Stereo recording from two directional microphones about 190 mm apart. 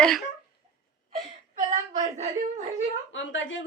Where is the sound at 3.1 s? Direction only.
80° left.